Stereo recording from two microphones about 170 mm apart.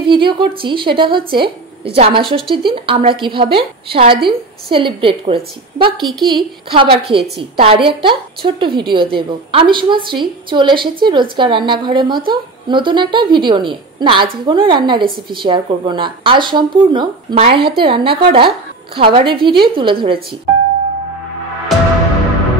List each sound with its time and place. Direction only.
0.0 s a woman's voice: 30° right (ahead or behind)